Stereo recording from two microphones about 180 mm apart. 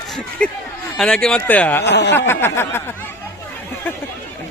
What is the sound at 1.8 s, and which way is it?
Speech, 70° left (ahead or behind).